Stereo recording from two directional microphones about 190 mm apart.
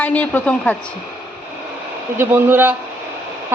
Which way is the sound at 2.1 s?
10° right (ahead or behind).